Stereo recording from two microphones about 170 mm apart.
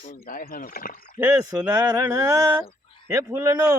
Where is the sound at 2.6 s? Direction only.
30° left (ahead or behind).